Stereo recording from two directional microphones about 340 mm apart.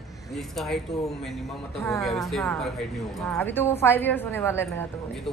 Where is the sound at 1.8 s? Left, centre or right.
Centre.